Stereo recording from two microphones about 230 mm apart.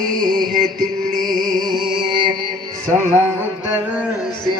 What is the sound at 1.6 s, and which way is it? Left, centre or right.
Music, centre.